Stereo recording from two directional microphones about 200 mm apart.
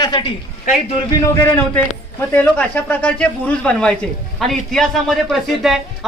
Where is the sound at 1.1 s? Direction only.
10° left (ahead or behind).